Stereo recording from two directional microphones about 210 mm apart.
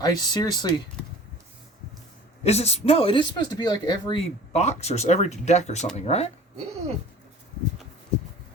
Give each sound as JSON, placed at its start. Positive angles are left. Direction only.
{"t": 0.0, "sound": "speech", "side_deg": 20}
{"t": 2.4, "sound": "speech", "side_deg": 30}